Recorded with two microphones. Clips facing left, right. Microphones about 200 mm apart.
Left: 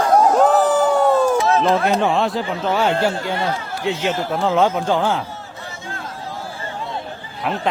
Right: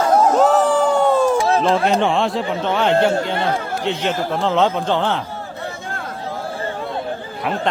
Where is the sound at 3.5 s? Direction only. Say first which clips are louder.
Right 3 dB; 55° right (ahead or behind).